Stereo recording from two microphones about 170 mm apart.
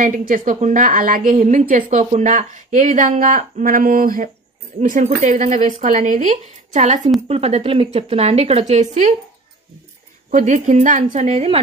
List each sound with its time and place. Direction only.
0.0 s a woman's voice: 50° right (ahead or behind)
4.7 s a woman's voice: 45° right (ahead or behind)
10.3 s a woman's voice: 45° right (ahead or behind)